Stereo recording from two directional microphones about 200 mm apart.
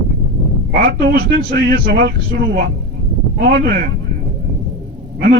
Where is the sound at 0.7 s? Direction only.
55° right (ahead or behind).